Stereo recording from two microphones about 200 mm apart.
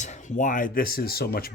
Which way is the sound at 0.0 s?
40° left (ahead or behind).